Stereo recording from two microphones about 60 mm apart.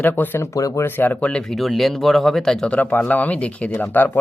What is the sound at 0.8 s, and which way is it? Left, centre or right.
Speech, left.